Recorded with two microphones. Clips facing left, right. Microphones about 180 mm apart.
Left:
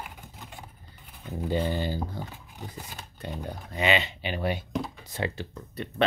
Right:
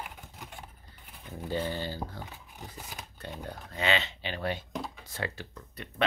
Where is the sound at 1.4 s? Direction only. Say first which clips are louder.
Left 5 dB; 15° left (ahead or behind).